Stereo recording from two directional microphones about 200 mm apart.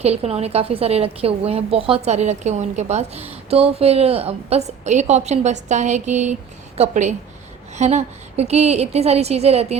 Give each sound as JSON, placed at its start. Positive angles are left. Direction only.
{"t": 0.0, "sound": "a woman's voice", "side_deg": -30}